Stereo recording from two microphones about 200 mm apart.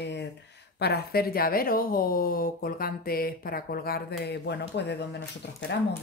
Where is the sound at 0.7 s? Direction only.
55° left (ahead or behind).